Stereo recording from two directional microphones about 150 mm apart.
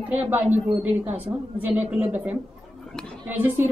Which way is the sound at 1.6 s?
10° right (ahead or behind).